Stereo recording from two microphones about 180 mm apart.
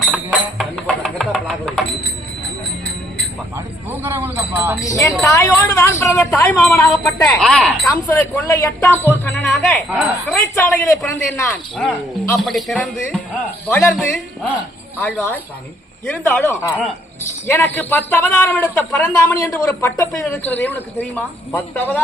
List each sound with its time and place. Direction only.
0.0 s music: centre (ahead or behind)
1.3 s a sound: centre (ahead or behind)
4.0 s jingle bell: 15° right (ahead or behind)
4.8 s a man's voice: 20° left (ahead or behind)
5.2 s a sound: 15° left (ahead or behind)
6.3 s a man's voice: 10° left (ahead or behind)
10.4 s a man's voice: 15° left (ahead or behind)
12.4 s speech: centre (ahead or behind)
13.7 s a man's voice: 15° left (ahead or behind)
15.0 s a man's voice: 10° left (ahead or behind)